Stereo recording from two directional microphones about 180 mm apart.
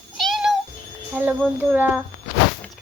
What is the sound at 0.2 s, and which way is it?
Meow, centre (ahead or behind).